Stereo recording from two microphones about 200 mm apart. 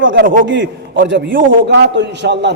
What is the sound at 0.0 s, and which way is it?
A man's voice, 70° right (ahead or behind).